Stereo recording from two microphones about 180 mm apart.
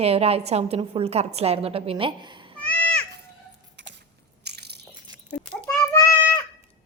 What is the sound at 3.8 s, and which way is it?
Keys jangling, 80° right.